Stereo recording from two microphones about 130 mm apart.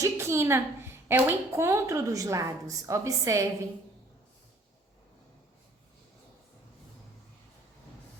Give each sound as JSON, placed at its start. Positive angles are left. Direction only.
{"t": 0.0, "sound": "a woman's voice", "side_deg": -20}